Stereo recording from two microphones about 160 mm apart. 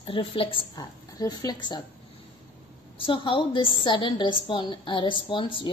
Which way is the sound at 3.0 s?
30° left (ahead or behind).